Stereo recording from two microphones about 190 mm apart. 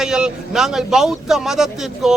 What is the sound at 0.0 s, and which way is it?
Speech, 5° right (ahead or behind).